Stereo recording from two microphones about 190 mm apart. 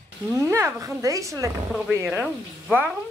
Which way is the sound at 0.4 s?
15° right (ahead or behind).